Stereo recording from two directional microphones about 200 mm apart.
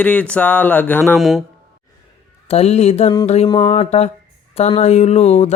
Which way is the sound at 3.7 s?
30° left (ahead or behind).